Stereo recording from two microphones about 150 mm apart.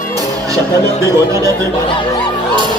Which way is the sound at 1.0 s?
20° right (ahead or behind).